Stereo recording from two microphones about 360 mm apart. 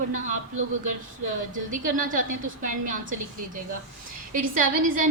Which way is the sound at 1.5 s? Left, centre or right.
Right.